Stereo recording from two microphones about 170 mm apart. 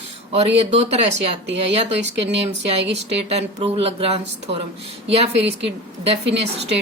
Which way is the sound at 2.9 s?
35° right (ahead or behind).